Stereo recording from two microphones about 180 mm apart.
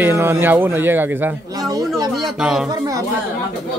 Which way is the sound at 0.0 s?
10° right (ahead or behind).